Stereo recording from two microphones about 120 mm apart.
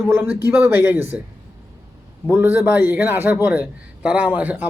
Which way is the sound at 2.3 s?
15° right (ahead or behind).